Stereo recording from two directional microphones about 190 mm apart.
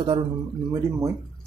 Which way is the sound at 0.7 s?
15° right (ahead or behind).